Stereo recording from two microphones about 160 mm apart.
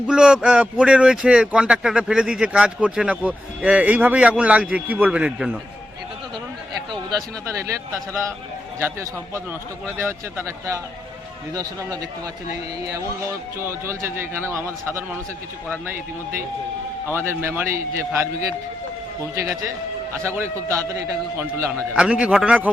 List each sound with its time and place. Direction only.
0.1 s speech: 5° right (ahead or behind)
6.9 s a man's voice: 20° right (ahead or behind)
13.6 s speech: 15° right (ahead or behind)
17.1 s speech: 15° right (ahead or behind)
19.4 s a man's voice: 20° right (ahead or behind)